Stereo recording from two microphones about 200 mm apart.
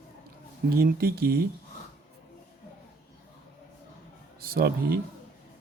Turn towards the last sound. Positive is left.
turn(degrees=-50)  # may be behind; listen again after turning